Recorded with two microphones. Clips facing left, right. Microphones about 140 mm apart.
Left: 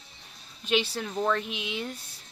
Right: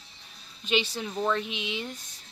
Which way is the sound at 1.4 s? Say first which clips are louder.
Even; 50° left (ahead or behind).